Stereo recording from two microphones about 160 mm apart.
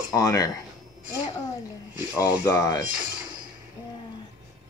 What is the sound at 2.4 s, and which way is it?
Speech, 20° left (ahead or behind).